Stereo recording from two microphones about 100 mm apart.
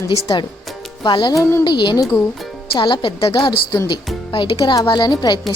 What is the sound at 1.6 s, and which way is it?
A woman's voice, 50° left (ahead or behind).